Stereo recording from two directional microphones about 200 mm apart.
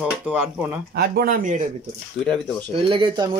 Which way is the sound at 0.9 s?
45° right (ahead or behind).